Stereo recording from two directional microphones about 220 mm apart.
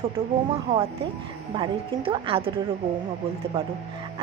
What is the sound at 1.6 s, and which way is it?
Speech, 25° right (ahead or behind).